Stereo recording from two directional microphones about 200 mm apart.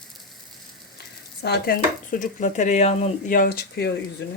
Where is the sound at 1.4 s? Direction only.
55° left (ahead or behind).